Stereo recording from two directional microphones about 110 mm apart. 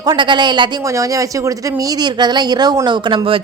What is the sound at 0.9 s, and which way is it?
A woman's voice, 30° right (ahead or behind).